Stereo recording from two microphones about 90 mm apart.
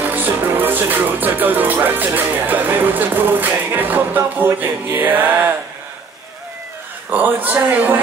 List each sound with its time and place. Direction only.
0.0 s music: 20° right (ahead or behind)
7.1 s speech: 20° right (ahead or behind)